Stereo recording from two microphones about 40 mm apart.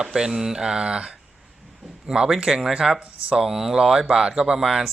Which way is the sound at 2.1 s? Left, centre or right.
Centre.